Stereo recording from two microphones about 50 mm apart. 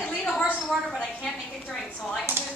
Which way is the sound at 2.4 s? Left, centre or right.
Right.